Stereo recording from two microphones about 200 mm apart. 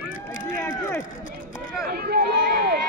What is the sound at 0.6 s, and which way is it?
Run, 15° left (ahead or behind).